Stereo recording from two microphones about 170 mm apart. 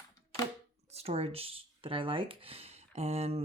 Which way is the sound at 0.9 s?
35° right (ahead or behind).